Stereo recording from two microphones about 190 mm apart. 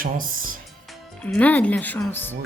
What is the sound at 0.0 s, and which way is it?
Speech, 45° right (ahead or behind).